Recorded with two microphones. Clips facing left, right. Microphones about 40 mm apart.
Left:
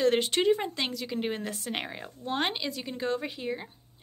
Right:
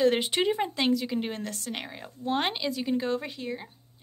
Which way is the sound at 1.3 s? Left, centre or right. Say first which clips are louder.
Left 1 dB; centre.